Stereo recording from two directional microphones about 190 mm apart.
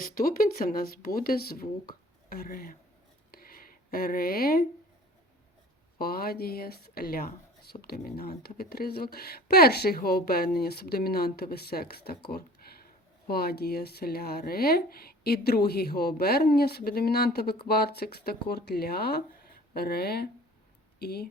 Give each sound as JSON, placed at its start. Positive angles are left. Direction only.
{"t": 0.0, "sound": "speech", "side_deg": 50}
{"t": 3.3, "sound": "a sound", "side_deg": 50}
{"t": 6.0, "sound": "speech", "side_deg": 50}